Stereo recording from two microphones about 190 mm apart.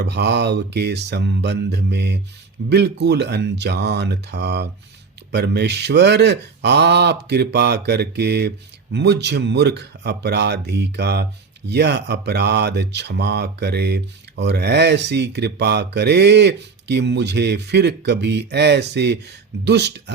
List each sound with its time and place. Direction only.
0.0 s speech: 60° right (ahead or behind)